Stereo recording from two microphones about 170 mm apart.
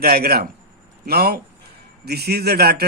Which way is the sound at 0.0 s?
65° right (ahead or behind).